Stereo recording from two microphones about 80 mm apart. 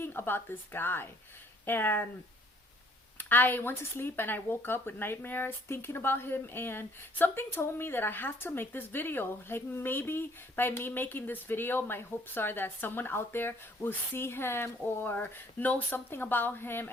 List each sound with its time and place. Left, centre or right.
0.0 s speech: left
3.2 s speech: left